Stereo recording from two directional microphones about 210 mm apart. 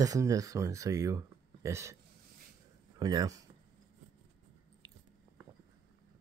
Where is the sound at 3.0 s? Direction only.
20° right (ahead or behind).